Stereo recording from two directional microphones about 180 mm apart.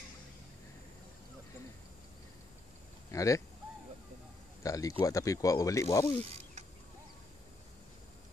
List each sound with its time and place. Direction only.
3.1 s speech: 15° left (ahead or behind)
4.6 s speech: 20° left (ahead or behind)